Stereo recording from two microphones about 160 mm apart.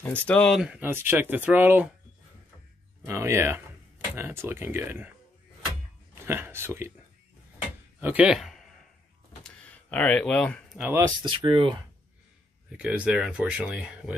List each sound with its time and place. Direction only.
0.0 s speech: 10° left (ahead or behind); by 1.9 s 10° right (ahead or behind)
3.1 s speech: 15° right (ahead or behind)
6.1 s speech: 15° right (ahead or behind)
8.0 s speech: 10° right (ahead or behind)
9.4 s a sound: 5° left (ahead or behind)
10.8 s speech: 15° right (ahead or behind)
11.2 s speech: 30° right (ahead or behind)
12.7 s speech: 5° right (ahead or behind)